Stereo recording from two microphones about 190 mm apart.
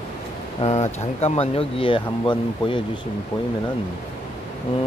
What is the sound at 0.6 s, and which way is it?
Speech, 35° left (ahead or behind).